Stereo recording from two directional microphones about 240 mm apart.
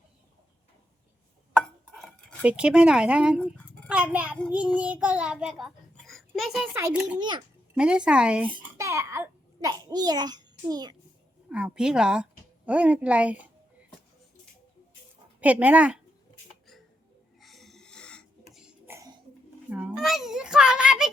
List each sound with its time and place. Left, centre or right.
1.5 s dishes: centre
3.8 s child singing: centre
6.8 s a child's voice: centre
7.2 s a child's voice: centre
7.8 s a child's voice: centre
11.4 s speech: centre
15.4 s speech: centre
17.4 s cough: centre
19.7 s a child's voice: centre